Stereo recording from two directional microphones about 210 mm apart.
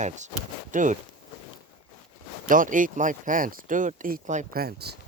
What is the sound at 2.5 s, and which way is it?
Speech, 40° right (ahead or behind).